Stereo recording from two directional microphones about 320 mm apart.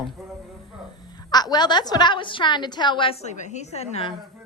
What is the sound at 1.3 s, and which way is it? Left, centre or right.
Speech, centre.